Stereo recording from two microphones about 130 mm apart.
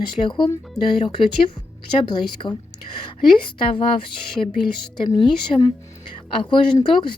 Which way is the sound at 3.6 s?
40° left (ahead or behind).